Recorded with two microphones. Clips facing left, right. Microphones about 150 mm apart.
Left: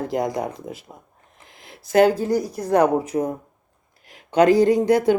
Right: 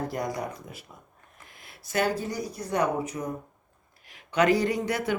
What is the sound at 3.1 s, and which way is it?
Speech, 50° left (ahead or behind).